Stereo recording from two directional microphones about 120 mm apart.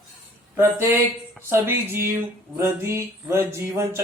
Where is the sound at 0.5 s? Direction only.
15° right (ahead or behind).